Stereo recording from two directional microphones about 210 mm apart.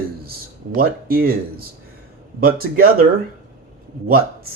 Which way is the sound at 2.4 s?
45° right (ahead or behind).